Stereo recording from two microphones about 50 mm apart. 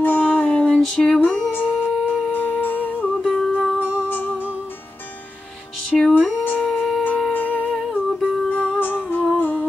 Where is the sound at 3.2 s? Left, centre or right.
Centre.